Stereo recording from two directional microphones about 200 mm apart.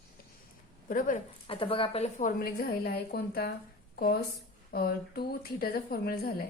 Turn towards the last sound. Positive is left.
turn(degrees=50)  # may be behind; listen again after turning